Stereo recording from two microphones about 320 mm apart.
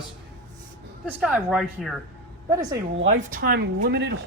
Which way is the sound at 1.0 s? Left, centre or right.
Centre.